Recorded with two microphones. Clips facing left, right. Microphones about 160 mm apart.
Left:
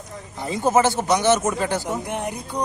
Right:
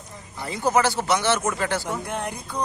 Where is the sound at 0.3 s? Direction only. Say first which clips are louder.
Left 3 dB; 20° left (ahead or behind).